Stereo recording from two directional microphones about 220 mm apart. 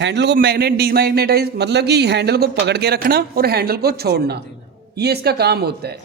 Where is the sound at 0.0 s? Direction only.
50° right (ahead or behind).